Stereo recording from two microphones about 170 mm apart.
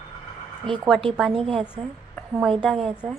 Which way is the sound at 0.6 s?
30° right (ahead or behind).